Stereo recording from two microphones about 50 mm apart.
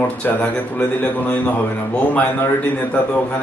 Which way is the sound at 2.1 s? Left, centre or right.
Left.